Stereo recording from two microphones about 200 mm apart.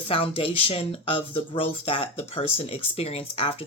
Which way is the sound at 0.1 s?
25° left (ahead or behind).